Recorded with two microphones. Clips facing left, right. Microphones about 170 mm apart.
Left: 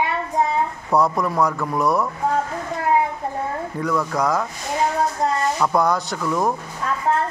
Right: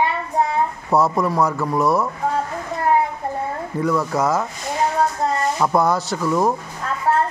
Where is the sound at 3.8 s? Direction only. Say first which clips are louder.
Right 3 dB; 5° right (ahead or behind).